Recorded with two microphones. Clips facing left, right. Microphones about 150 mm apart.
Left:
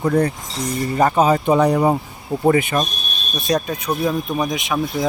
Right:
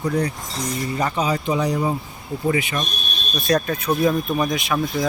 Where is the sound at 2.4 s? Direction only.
50° left (ahead or behind).